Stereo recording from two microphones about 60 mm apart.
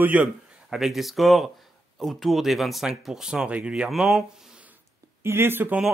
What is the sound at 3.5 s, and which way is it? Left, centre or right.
Speech, right.